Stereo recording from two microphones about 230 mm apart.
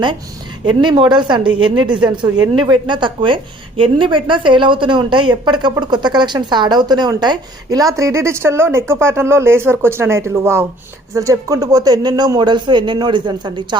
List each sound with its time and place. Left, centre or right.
0.6 s a woman's voice: centre